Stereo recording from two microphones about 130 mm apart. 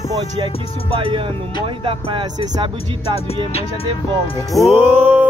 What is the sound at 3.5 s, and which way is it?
Speech, 45° left (ahead or behind).